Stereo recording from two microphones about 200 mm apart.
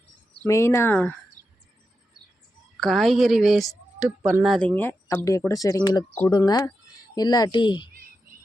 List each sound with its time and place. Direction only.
0.4 s speech: 15° left (ahead or behind)
1.4 s a sound: 20° right (ahead or behind)
2.8 s a woman's voice: centre (ahead or behind); by 7.9 s 20° left (ahead or behind)